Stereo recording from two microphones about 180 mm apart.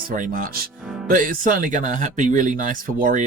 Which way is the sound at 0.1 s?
50° right (ahead or behind).